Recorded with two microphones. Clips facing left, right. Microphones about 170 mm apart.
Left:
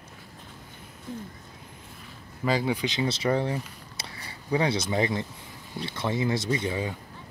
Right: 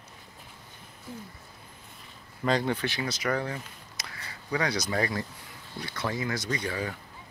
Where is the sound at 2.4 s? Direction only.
5° left (ahead or behind); by 7.0 s 20° left (ahead or behind).